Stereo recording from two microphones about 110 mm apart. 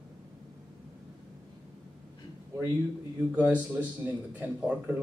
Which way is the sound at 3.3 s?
15° right (ahead or behind).